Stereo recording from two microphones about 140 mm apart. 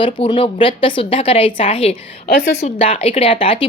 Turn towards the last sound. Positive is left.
turn(degrees=40)  # may be behind; listen again after turning